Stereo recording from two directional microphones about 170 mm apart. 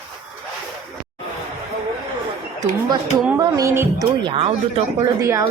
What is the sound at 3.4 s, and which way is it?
Speech, 20° right (ahead or behind).